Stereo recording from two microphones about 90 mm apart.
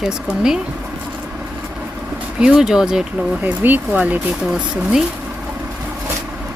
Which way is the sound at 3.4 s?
20° right (ahead or behind).